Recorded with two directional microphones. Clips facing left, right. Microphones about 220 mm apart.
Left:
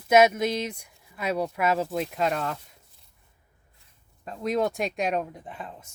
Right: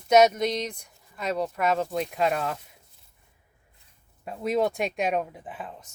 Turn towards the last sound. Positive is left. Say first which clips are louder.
# even
turn(degrees=-5)  # may be behind; listen again after turning